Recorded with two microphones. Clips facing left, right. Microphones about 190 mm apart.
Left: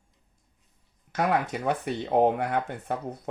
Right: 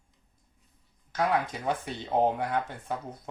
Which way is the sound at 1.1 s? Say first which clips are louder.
Left 2 dB; 65° left (ahead or behind).